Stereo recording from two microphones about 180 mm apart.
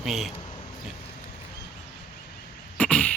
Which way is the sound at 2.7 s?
5° left (ahead or behind).